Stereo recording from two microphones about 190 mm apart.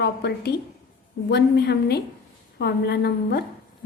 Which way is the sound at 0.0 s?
60° left (ahead or behind).